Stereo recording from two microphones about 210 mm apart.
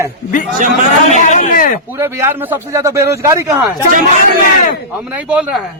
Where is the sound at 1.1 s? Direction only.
35° left (ahead or behind).